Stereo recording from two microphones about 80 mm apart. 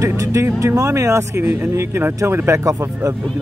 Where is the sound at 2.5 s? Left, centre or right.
Right.